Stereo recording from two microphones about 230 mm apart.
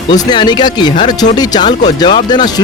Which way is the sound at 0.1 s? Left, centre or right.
Centre.